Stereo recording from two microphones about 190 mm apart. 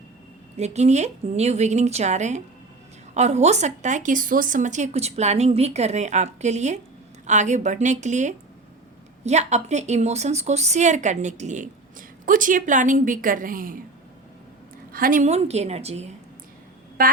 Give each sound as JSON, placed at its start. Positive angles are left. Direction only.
{"t": 0.5, "sound": "a woman's voice", "side_deg": -35}
{"t": 14.9, "sound": "a woman's voice", "side_deg": -45}
{"t": 17.0, "sound": "a sound", "side_deg": -50}